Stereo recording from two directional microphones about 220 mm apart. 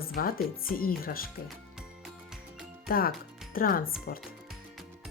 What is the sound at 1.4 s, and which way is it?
Music, centre (ahead or behind).